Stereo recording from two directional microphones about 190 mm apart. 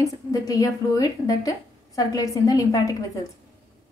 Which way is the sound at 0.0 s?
20° left (ahead or behind).